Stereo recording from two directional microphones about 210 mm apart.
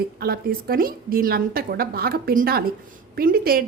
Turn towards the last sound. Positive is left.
turn(degrees=-45)  # may be behind; listen again after turning